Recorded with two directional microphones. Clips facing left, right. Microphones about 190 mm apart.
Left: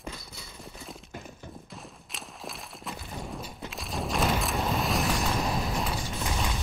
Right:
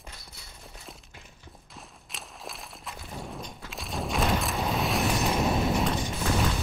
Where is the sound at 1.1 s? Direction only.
45° left (ahead or behind).